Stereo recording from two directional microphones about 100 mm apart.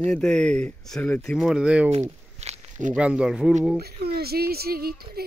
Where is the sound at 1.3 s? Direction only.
5° right (ahead or behind).